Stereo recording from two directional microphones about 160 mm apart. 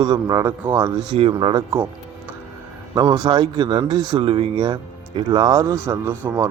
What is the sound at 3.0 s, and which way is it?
Speech, 25° right (ahead or behind).